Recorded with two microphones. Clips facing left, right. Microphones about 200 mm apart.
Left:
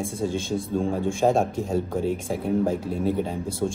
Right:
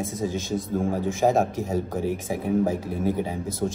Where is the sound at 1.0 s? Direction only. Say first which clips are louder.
Even; 5° right (ahead or behind).